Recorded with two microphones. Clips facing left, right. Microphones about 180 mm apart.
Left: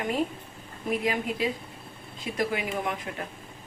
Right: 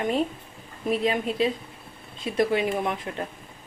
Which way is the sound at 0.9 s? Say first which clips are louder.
Right 3 dB; 25° right (ahead or behind).